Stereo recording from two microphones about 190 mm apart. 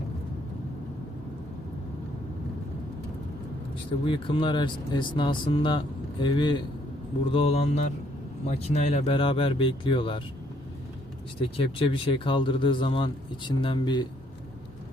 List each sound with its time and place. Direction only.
4.0 s speech: 25° left (ahead or behind)
11.3 s speech: 30° left (ahead or behind)